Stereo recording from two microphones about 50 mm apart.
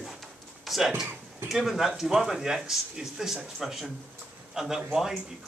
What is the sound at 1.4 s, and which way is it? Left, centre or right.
Speech, centre.